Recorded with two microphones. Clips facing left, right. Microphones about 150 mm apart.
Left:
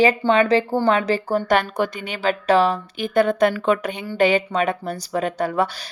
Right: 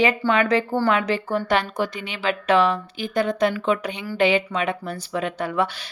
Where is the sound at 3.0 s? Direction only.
55° left (ahead or behind).